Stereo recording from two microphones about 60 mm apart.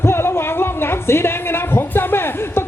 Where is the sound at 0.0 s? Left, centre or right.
Left.